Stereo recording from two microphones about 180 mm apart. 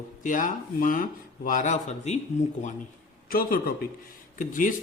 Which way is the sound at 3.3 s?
55° left (ahead or behind).